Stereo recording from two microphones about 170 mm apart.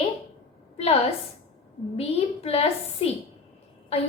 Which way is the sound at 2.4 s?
35° left (ahead or behind).